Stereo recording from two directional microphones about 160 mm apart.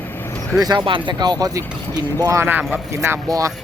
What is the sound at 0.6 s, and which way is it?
Speech, 25° right (ahead or behind).